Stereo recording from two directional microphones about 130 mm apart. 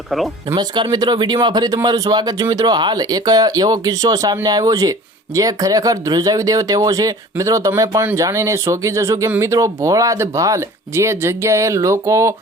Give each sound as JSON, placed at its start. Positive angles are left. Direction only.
{"t": 0.5, "sound": "speech", "side_deg": -35}